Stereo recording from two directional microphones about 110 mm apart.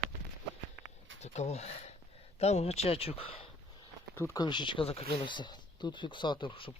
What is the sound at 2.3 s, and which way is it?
Speech, 75° left (ahead or behind).